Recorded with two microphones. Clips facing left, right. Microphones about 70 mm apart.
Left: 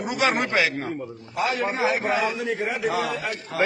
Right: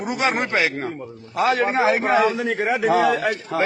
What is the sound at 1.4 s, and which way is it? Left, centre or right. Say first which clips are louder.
A man's voice: right 5 dB; right.